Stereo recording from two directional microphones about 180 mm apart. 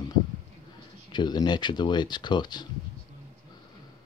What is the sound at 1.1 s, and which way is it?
Speech, 25° left (ahead or behind).